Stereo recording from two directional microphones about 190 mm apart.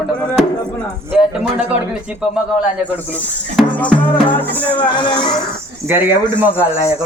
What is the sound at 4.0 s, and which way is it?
Music, 10° left (ahead or behind).